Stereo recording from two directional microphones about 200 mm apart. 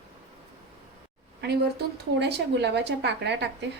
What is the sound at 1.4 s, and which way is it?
A woman's voice, 55° right (ahead or behind).